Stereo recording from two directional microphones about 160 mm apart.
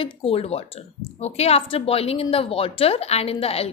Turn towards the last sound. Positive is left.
turn(degrees=40)  # may be behind; listen again after turning